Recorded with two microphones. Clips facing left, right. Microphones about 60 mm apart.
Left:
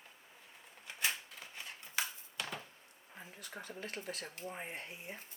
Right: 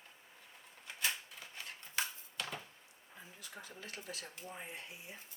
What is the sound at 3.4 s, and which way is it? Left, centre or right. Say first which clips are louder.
Speech: left 5 dB; left.